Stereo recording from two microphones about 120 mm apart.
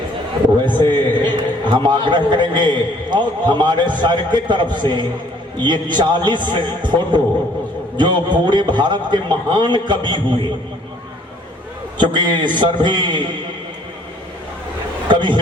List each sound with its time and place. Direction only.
0.6 s a man's voice: 40° right (ahead or behind)
11.9 s a man's voice: 40° right (ahead or behind)
15.1 s a man's voice: 40° right (ahead or behind)